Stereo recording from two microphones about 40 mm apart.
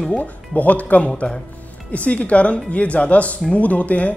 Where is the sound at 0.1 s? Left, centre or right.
Left.